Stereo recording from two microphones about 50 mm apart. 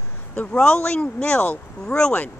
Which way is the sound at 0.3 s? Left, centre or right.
Left.